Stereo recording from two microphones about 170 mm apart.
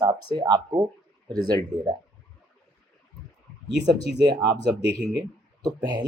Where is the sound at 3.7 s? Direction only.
90° right.